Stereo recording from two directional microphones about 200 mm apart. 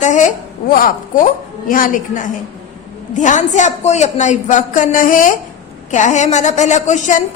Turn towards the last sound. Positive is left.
turn(degrees=35)  # may be behind; listen again after turning